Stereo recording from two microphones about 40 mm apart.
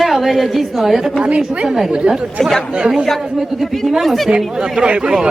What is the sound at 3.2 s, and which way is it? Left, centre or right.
Speech, centre.